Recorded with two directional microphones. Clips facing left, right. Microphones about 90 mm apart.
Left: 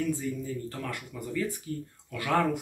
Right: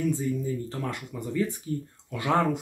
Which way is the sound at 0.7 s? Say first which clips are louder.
Right 3 dB; 25° right (ahead or behind).